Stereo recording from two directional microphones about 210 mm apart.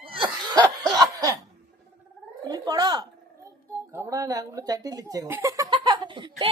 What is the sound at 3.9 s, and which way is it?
Speech, 15° right (ahead or behind).